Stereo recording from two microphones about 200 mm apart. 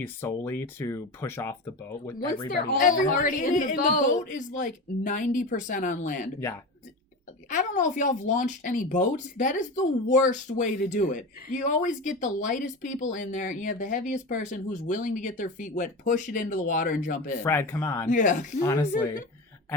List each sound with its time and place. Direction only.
0.0 s speech: 10° left (ahead or behind)
2.5 s speech: 45° left (ahead or behind)
7.5 s speech: 40° left (ahead or behind)
17.4 s speech: 10° left (ahead or behind)
18.1 s speech: 40° left (ahead or behind)
18.6 s speech: 15° left (ahead or behind)